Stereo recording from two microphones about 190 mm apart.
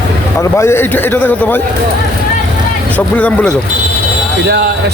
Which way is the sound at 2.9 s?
10° left (ahead or behind).